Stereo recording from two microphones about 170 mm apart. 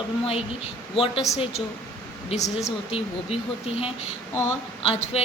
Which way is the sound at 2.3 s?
40° left (ahead or behind).